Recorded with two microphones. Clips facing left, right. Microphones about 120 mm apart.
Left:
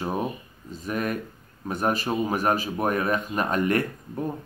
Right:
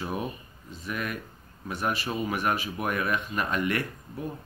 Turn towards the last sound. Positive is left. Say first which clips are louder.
# left 6 dB
turn(degrees=40)  # may be behind; listen again after turning